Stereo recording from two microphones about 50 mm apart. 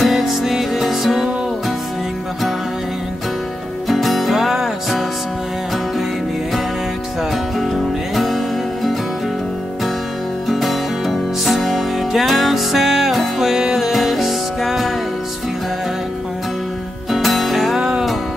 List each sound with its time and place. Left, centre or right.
0.0 s music: centre
3.8 s music: centre
7.5 s music: centre
10.5 s music: centre
17.1 s music: centre
17.7 s music: centre